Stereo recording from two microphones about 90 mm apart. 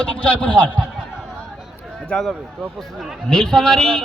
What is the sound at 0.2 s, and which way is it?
Speech, 15° left (ahead or behind).